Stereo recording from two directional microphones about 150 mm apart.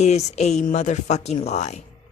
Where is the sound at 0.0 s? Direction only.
50° left (ahead or behind).